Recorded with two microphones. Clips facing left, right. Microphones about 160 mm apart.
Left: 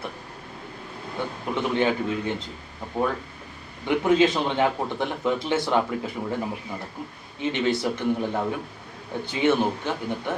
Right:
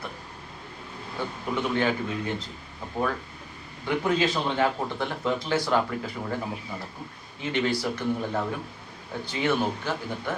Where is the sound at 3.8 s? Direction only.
20° left (ahead or behind).